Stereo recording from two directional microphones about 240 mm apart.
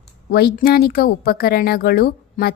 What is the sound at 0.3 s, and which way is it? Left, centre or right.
Speech, left.